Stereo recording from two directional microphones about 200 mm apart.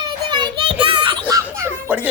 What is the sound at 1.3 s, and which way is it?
Music, 10° right (ahead or behind).